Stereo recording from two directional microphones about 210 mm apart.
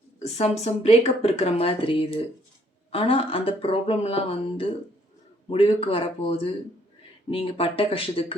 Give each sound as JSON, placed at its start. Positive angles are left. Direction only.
{"t": 0.2, "sound": "speech", "side_deg": 30}